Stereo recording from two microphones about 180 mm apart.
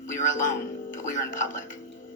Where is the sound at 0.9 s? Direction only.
45° left (ahead or behind).